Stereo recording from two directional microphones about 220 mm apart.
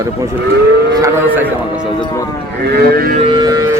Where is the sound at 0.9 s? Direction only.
15° right (ahead or behind).